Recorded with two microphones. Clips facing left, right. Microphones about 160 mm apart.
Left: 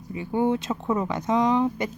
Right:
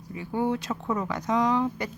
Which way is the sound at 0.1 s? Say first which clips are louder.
Left 4 dB; 20° left (ahead or behind).